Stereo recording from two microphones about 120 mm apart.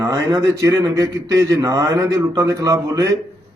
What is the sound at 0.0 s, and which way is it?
A man's voice, 30° right (ahead or behind).